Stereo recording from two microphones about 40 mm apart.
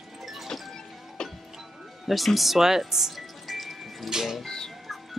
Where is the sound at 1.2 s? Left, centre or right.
Centre.